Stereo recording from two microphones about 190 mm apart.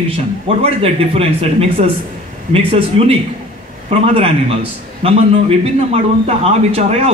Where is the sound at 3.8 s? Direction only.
30° right (ahead or behind).